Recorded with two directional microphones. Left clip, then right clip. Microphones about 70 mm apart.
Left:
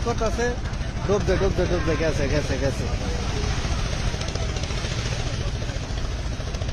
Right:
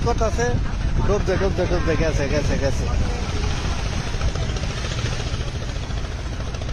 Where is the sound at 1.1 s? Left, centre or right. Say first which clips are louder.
Even; left.